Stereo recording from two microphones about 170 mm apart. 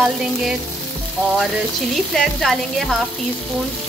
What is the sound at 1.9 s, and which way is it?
Speech, centre (ahead or behind).